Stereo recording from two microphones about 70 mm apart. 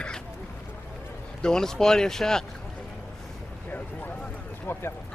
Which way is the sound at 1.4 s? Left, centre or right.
Centre.